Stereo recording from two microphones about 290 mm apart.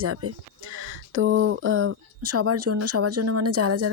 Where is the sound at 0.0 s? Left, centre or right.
Right.